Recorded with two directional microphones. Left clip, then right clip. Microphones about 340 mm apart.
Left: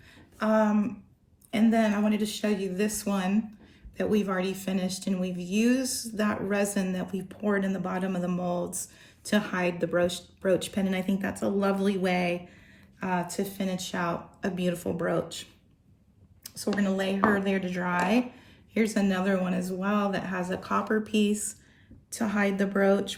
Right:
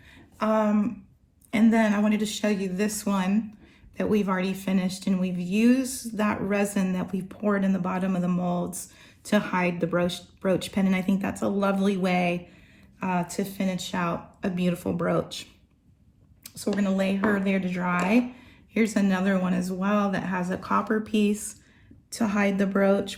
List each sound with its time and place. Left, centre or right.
0.1 s a sound: centre
1.5 s speech: centre
4.6 s speech: centre
5.8 s speech: right
6.1 s speech: centre
17.3 s speech: centre